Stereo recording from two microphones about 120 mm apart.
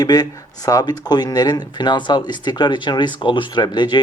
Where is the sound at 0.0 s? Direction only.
35° left (ahead or behind).